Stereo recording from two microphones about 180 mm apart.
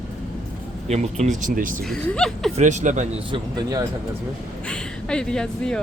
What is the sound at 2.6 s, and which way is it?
Speech, 40° right (ahead or behind).